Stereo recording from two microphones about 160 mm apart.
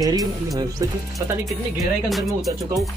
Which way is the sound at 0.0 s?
20° right (ahead or behind).